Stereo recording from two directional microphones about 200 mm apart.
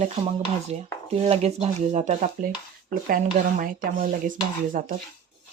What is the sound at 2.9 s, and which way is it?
Dishes, 45° right (ahead or behind).